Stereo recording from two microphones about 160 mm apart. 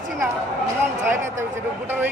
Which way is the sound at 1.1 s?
15° right (ahead or behind).